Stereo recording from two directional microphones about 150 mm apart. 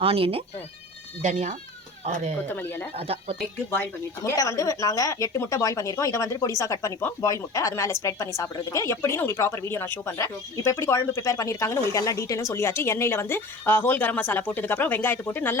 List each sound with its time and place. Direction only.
0.0 s speech: 40° right (ahead or behind)
1.2 s speech: 50° right (ahead or behind)
2.6 s speech: 15° left (ahead or behind)
2.9 s speech: 40° right (ahead or behind)
4.2 s speech: 20° left (ahead or behind)